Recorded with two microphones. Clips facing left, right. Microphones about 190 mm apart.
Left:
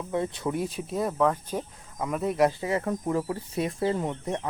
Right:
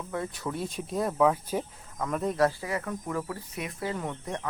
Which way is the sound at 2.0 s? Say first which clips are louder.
Left 2 dB; 10° left (ahead or behind).